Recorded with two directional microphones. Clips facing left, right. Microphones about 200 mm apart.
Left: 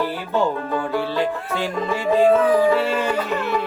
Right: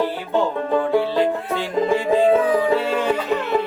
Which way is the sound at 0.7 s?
25° right (ahead or behind).